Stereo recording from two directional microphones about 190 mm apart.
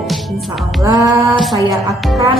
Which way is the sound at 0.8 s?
15° right (ahead or behind).